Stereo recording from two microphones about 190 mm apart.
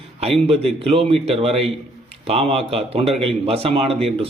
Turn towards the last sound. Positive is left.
turn(degrees=-30)  # may be behind; listen again after turning